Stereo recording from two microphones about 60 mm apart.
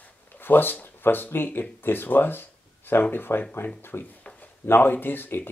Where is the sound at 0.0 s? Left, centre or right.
Left.